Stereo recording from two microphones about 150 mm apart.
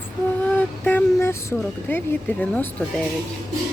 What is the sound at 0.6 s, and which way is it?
Speech, 10° left (ahead or behind).